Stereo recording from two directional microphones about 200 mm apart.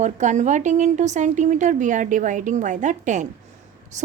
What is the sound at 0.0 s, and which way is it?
A woman's voice, 35° right (ahead or behind).